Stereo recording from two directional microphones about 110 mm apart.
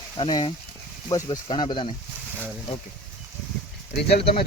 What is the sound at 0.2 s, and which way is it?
Speech, 50° left (ahead or behind).